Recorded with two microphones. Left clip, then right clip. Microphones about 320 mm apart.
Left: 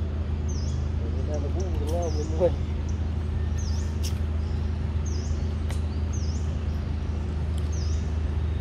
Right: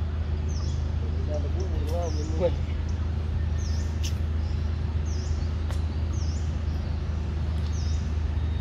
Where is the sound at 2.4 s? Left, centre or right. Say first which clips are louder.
Left 3 dB; centre.